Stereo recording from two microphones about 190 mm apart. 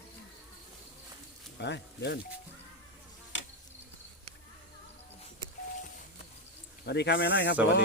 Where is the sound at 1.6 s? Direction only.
60° left (ahead or behind).